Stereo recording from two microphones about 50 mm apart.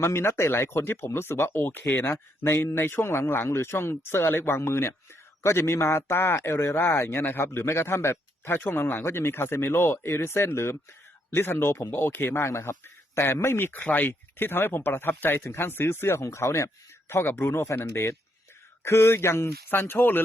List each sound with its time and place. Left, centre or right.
0.0 s speech: left
6.7 s speech: left
11.3 s speech: left
12.4 s speech: left
13.1 s speech: left
14.1 s speech: left
17.3 s speech: left